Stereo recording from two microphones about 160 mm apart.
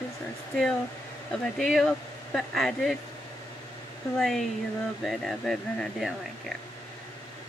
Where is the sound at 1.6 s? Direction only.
Centre (ahead or behind).